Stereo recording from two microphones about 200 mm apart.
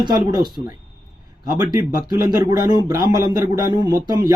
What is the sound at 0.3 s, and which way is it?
A man's voice, 20° right (ahead or behind).